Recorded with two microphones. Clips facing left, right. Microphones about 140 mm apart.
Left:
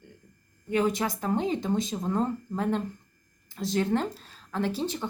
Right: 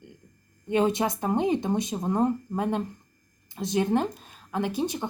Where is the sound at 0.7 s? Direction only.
20° right (ahead or behind).